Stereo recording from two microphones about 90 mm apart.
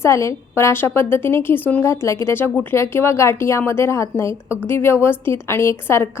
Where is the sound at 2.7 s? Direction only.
30° left (ahead or behind).